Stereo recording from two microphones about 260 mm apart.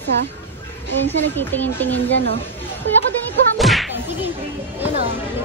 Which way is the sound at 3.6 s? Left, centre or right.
Centre.